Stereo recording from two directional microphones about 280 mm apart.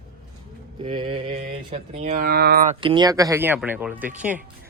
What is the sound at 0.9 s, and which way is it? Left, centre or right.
Speech, centre.